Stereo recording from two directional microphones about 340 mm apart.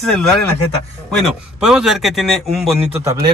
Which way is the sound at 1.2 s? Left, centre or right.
Centre.